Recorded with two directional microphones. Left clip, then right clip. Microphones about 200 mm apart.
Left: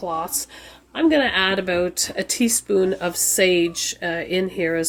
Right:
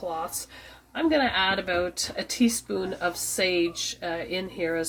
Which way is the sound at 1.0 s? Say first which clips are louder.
Left 5 dB; 55° left (ahead or behind).